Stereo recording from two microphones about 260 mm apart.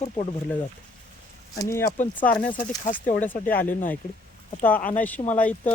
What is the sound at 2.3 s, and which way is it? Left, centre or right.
Speech, centre.